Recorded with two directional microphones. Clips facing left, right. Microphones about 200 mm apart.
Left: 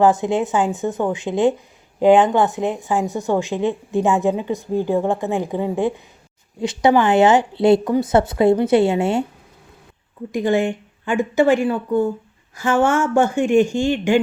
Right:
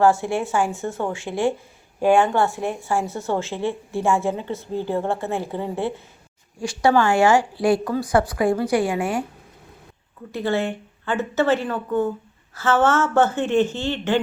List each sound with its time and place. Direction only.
0.0 s a woman's voice: 20° left (ahead or behind)
10.3 s speech: 15° left (ahead or behind)